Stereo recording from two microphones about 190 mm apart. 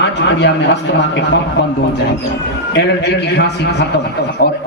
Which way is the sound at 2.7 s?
60° left (ahead or behind).